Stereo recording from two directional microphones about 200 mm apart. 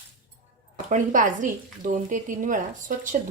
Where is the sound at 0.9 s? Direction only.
40° right (ahead or behind).